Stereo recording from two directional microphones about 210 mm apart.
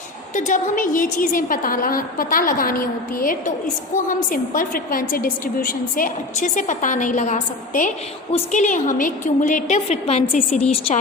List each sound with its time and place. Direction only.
0.3 s a woman's voice: 40° left (ahead or behind)